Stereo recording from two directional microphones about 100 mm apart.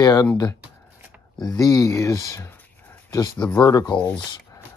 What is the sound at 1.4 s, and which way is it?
Speech, 40° left (ahead or behind).